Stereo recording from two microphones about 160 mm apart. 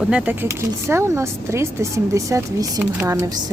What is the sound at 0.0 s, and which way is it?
Speech, 5° right (ahead or behind).